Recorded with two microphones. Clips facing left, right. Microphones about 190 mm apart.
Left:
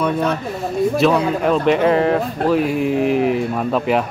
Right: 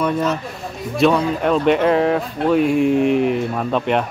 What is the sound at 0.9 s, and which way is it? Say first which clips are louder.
Speech: right 3 dB; centre (ahead or behind).